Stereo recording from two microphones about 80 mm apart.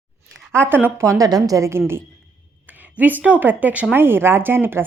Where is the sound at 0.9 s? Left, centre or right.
Right.